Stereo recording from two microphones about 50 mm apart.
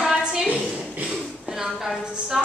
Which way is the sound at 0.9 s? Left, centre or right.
Right.